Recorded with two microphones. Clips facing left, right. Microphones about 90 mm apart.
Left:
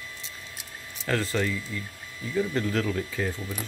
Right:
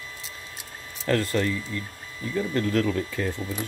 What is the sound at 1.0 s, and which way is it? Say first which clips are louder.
Speech: right 3 dB; 50° right (ahead or behind).